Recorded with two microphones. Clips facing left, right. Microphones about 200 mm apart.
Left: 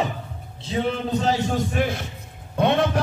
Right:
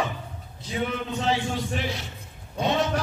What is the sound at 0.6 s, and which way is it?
A man's voice, 30° left (ahead or behind).